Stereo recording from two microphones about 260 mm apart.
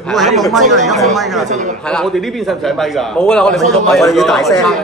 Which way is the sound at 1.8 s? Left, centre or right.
Centre.